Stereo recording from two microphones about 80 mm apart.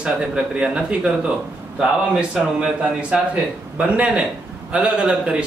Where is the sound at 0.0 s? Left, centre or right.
Centre.